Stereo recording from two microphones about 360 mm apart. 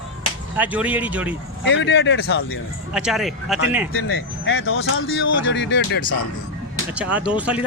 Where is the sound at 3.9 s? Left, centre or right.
Left.